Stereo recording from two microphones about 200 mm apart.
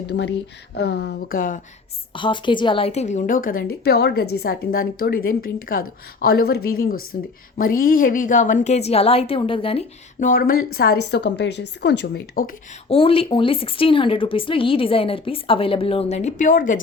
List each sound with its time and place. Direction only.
0.1 s a woman's voice: 55° left (ahead or behind)
2.1 s a woman's voice: 25° left (ahead or behind)
10.2 s a woman's voice: 45° left (ahead or behind)
12.9 s speech: 25° left (ahead or behind); by 16.8 s 40° left (ahead or behind)